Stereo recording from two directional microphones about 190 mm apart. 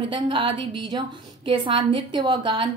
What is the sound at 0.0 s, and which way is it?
A woman's voice, 25° right (ahead or behind).